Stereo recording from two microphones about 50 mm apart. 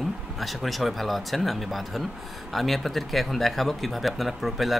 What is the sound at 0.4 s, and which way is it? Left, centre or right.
Speech, centre.